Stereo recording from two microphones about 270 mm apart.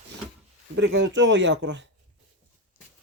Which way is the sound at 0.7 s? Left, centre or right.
Right.